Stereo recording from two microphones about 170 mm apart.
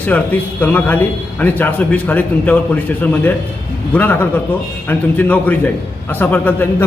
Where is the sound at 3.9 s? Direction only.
10° left (ahead or behind).